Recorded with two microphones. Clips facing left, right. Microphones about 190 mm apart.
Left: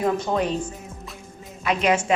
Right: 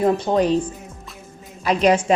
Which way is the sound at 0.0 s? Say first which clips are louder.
Right 5 dB; 35° right (ahead or behind).